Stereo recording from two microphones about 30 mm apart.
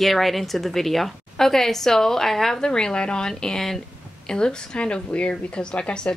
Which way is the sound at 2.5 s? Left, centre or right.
Left.